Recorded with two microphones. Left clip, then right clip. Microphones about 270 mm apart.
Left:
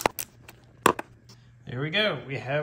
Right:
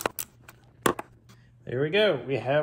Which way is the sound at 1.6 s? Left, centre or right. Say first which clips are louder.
Right 3 dB; centre.